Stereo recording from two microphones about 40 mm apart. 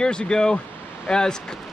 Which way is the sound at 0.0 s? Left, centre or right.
Left.